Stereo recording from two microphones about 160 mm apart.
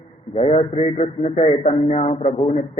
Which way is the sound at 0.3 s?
40° left (ahead or behind).